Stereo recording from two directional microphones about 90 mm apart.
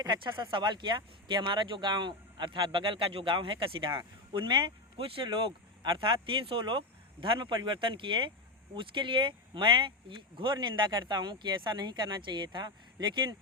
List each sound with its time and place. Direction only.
0.0 s speech: 60° right (ahead or behind)